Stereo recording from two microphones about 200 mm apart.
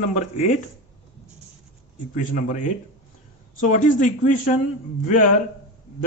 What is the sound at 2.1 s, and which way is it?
A man's voice, 40° left (ahead or behind).